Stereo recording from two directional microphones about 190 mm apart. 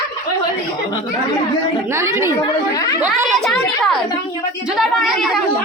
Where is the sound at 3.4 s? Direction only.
Centre (ahead or behind).